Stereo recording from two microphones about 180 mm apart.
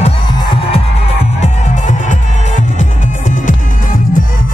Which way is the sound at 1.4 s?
40° left (ahead or behind).